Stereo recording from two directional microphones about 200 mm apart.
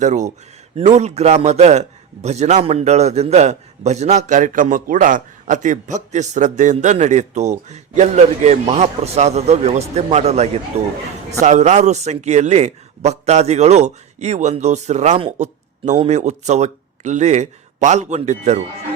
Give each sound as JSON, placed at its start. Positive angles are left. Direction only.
{"t": 0.0, "sound": "a man's voice", "side_deg": -35}